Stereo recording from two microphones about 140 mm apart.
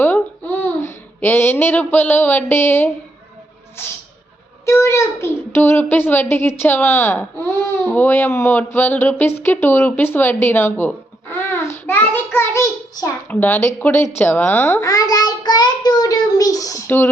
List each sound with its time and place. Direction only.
0.0 s babbling: 15° left (ahead or behind)
3.8 s a child's voice: 15° left (ahead or behind)
14.8 s child singing: 25° left (ahead or behind)